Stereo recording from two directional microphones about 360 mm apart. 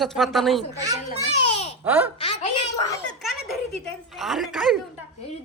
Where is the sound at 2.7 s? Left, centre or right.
Centre.